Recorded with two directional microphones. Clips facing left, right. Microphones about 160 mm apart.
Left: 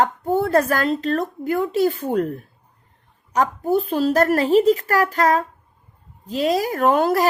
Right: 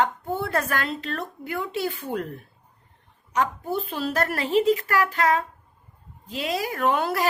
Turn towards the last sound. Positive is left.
turn(degrees=40)  # may be behind; listen again after turning